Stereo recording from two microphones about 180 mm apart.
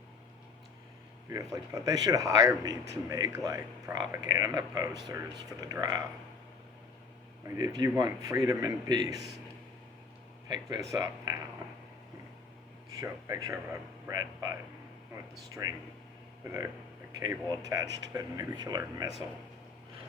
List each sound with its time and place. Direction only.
1.3 s speech: 20° right (ahead or behind)
7.4 s speech: 20° right (ahead or behind)
10.5 s speech: 25° right (ahead or behind)
13.0 s speech: 20° right (ahead or behind)
15.6 s speech: 20° right (ahead or behind)